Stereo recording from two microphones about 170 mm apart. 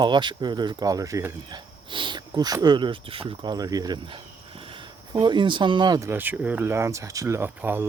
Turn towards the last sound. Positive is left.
turn(degrees=-15)  # may be behind; listen again after turning